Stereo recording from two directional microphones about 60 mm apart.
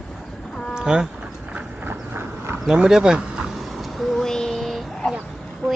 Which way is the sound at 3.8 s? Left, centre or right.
Centre.